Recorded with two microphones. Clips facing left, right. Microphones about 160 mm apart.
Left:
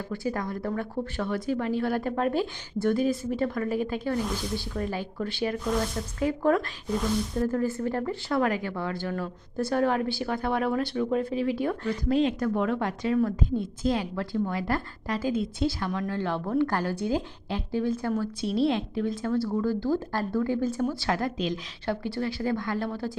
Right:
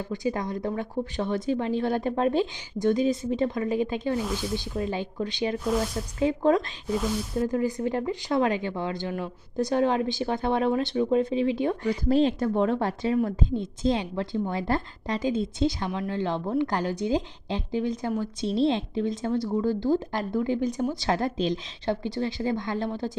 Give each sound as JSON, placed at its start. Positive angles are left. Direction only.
{"t": 0.1, "sound": "a woman's voice", "side_deg": -20}
{"t": 4.2, "sound": "speech", "side_deg": -5}
{"t": 4.5, "sound": "a woman's voice", "side_deg": -20}
{"t": 5.6, "sound": "speech", "side_deg": -5}
{"t": 6.1, "sound": "a woman's voice", "side_deg": -20}
{"t": 6.8, "sound": "speech", "side_deg": -5}
{"t": 7.4, "sound": "a woman's voice", "side_deg": -15}
{"t": 12.0, "sound": "a woman's voice", "side_deg": -30}